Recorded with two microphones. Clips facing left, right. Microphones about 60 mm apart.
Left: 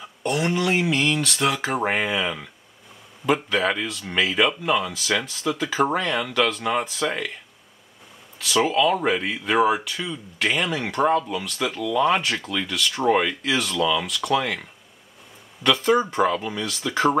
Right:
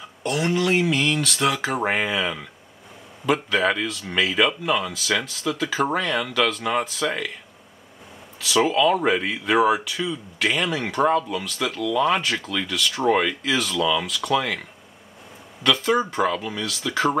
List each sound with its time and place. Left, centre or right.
0.0 s speech: centre
8.4 s speech: centre
15.6 s speech: centre